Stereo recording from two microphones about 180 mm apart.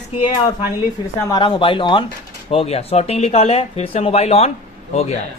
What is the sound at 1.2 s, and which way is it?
Speech, 15° left (ahead or behind).